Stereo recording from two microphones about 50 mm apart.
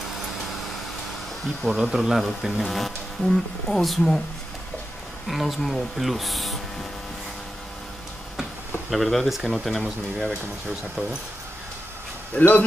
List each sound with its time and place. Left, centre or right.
1.8 s speech: centre
5.3 s speech: centre
8.9 s speech: centre
12.4 s speech: left